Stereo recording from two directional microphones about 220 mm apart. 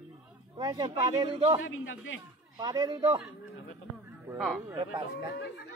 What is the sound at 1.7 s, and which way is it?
Speech, 60° left (ahead or behind).